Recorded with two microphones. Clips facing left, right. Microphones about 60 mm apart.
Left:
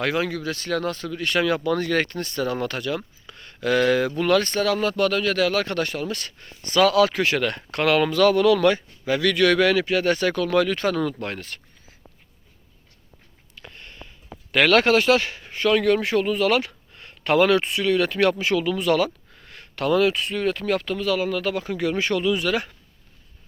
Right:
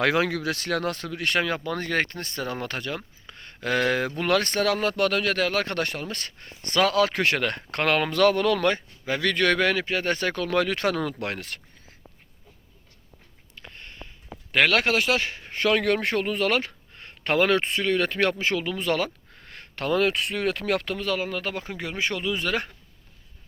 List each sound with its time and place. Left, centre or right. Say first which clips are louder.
0.0 s speech: right 1 dB; right
0.8 s speech: left 2 dB; right
1.4 s speech: left 7 dB; right
4.3 s speech: left 1 dB; right
7.1 s speech: left 2 dB; right
13.6 s a sound: left 1 dB; right
14.5 s speech: left 4 dB; centre
15.2 s a sound: even; right
15.6 s speech: left 3 dB; right
20.1 s speech: left 2 dB; right
21.2 s speech: left 6 dB; right